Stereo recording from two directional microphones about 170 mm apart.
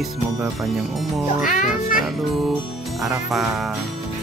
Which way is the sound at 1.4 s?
55° left (ahead or behind).